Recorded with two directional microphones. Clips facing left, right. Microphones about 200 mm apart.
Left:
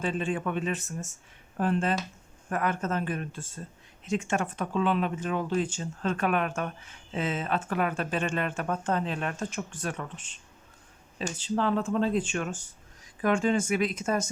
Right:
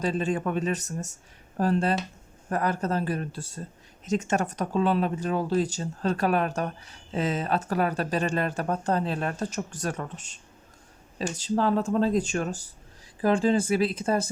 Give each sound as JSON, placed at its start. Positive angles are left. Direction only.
{"t": 0.0, "sound": "speech", "side_deg": -40}